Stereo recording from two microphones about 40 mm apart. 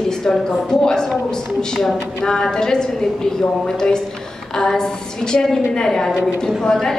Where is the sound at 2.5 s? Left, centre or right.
Centre.